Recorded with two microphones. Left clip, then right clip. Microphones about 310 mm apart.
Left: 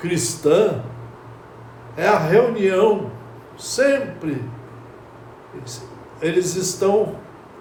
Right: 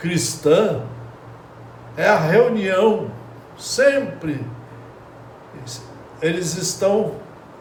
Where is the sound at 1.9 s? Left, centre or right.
Centre.